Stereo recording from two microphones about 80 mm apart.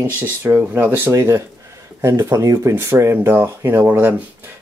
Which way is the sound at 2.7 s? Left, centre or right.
Right.